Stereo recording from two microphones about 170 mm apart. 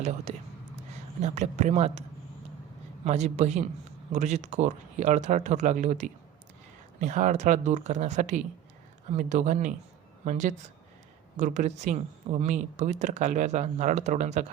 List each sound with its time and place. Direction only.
0.3 s speech: 40° right (ahead or behind)